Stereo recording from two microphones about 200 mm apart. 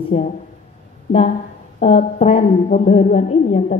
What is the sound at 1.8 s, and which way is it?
A woman's voice, 30° left (ahead or behind).